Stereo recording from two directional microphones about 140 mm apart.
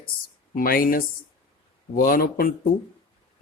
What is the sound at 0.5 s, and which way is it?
Speech, 90° left.